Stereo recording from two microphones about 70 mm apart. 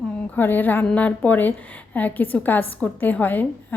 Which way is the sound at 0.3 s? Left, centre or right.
Left.